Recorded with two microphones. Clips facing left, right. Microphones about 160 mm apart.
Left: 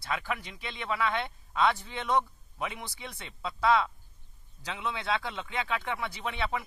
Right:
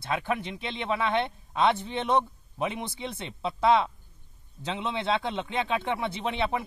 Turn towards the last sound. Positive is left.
turn(degrees=-20)  # may be behind; listen again after turning